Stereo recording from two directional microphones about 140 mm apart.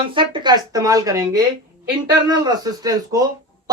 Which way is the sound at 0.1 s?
35° right (ahead or behind).